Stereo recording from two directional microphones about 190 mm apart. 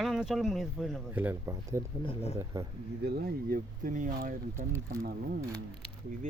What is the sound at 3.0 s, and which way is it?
Speech, 50° right (ahead or behind).